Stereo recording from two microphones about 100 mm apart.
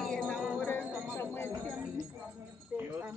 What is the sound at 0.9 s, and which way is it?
Bell, 15° right (ahead or behind).